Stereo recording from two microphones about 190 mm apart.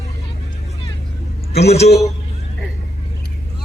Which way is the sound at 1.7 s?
35° left (ahead or behind).